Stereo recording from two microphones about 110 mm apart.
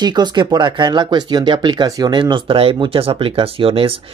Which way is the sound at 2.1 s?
50° right (ahead or behind).